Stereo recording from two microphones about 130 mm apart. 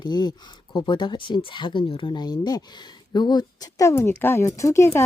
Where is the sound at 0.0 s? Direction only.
35° left (ahead or behind).